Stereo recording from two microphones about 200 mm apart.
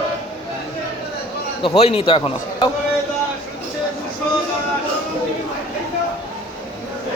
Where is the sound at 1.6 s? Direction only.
30° left (ahead or behind).